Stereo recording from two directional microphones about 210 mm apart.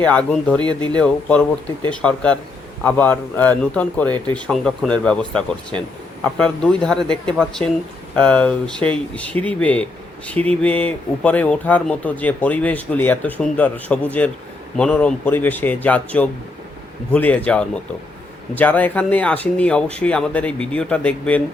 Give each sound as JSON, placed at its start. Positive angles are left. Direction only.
{"t": 0.0, "sound": "speech", "side_deg": 5}
{"t": 0.6, "sound": "speech", "side_deg": -20}
{"t": 0.9, "sound": "speech", "side_deg": 5}